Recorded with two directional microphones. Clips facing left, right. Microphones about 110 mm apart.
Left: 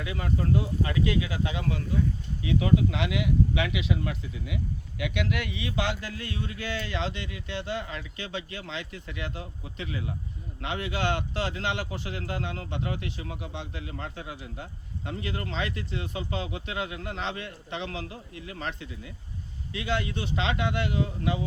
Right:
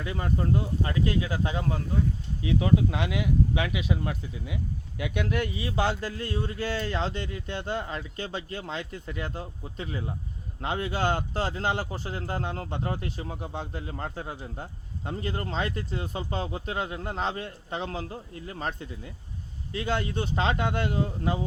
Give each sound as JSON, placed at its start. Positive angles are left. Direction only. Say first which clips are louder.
{"t": 0.0, "sound": "a man's voice", "louder": "right 1 dB", "side_deg": -35}